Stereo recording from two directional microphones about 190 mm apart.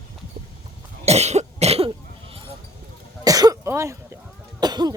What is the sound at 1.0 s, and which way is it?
Cough, 35° right (ahead or behind).